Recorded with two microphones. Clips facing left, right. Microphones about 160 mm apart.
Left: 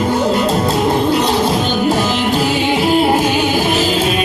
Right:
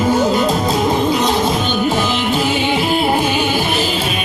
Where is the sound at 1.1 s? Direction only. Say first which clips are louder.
Left 1 dB; 35° left (ahead or behind).